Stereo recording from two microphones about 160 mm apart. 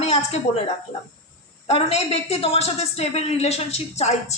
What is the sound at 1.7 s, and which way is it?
A woman's voice, 40° left (ahead or behind).